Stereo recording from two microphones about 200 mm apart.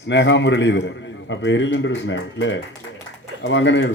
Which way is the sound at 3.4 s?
65° left (ahead or behind).